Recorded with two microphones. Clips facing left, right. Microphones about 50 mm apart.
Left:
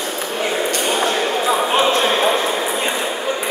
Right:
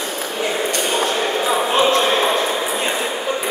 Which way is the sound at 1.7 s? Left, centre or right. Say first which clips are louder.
Right 2 dB; centre.